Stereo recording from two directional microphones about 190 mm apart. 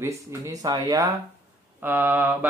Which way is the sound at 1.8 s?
10° right (ahead or behind).